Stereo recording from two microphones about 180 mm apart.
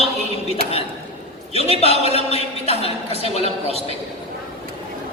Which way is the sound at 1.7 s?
35° left (ahead or behind).